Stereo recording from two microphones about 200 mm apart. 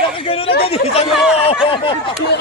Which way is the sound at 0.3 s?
30° left (ahead or behind).